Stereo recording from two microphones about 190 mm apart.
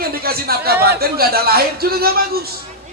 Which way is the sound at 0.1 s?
55° right (ahead or behind).